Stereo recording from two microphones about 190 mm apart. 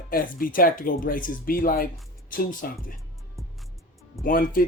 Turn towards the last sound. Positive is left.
turn(degrees=50)  # may be behind; listen again after turning